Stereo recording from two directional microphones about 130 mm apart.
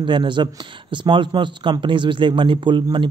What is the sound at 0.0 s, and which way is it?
Speech, 40° right (ahead or behind).